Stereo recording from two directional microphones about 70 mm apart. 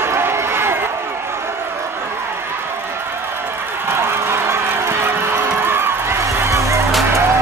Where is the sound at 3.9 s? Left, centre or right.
Right.